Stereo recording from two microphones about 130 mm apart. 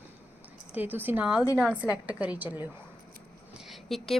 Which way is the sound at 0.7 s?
15° right (ahead or behind).